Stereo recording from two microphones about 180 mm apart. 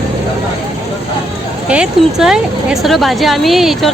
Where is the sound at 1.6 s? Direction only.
5° right (ahead or behind).